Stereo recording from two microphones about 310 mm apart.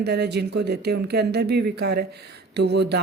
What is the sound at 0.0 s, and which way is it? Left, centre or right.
Speech, right.